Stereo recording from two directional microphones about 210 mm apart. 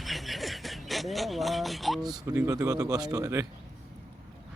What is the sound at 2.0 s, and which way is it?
Speech, 15° right (ahead or behind).